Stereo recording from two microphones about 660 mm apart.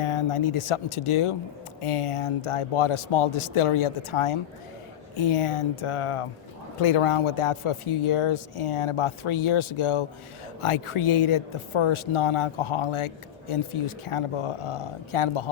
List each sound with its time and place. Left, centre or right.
0.0 s speech: left